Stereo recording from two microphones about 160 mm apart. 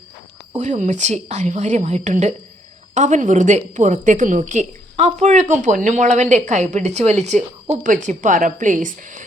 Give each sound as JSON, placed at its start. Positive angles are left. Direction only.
{"t": 0.5, "sound": "a woman's voice", "side_deg": -50}